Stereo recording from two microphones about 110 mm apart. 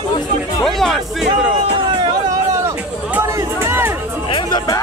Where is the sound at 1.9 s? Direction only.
45° right (ahead or behind).